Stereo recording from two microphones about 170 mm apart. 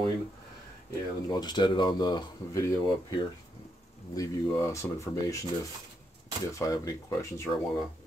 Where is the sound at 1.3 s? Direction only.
25° left (ahead or behind).